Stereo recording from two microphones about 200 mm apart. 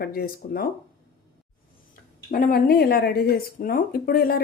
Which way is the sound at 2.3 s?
45° left (ahead or behind).